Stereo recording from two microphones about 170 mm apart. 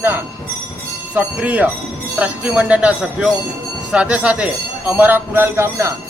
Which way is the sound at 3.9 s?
5° right (ahead or behind).